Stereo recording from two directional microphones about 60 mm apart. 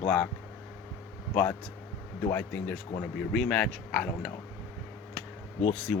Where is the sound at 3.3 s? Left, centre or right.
Centre.